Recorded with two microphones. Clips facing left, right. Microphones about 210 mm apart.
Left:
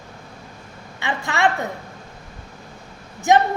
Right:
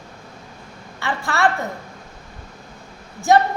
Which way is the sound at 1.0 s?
20° left (ahead or behind).